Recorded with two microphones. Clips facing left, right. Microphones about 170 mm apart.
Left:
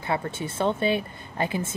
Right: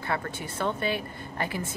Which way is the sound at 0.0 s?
20° left (ahead or behind).